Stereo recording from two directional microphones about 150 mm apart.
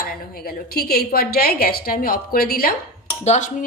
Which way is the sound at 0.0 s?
90° left.